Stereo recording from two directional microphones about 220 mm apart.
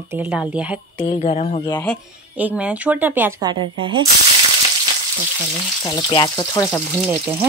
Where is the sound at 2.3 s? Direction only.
5° right (ahead or behind); by 4.0 s 20° right (ahead or behind).